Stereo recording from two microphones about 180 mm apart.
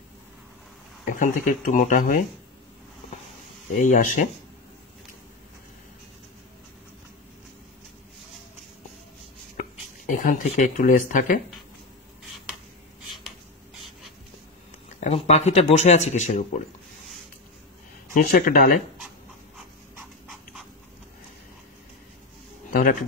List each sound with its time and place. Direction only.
1.2 s speech: 45° left (ahead or behind)
3.7 s speech: 45° left (ahead or behind)
9.6 s speech: 50° left (ahead or behind)
15.0 s speech: 35° left (ahead or behind)
18.1 s speech: 50° left (ahead or behind)
22.7 s a sound: 50° left (ahead or behind)